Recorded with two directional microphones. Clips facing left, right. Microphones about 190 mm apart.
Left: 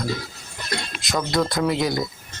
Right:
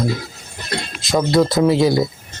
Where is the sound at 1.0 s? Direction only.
25° right (ahead or behind).